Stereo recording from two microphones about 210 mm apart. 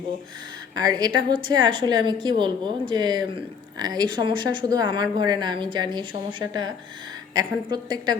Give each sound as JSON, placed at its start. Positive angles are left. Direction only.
{"t": 0.8, "sound": "a woman's voice", "side_deg": -20}